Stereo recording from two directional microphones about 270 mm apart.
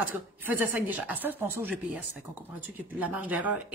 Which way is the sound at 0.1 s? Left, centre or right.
Centre.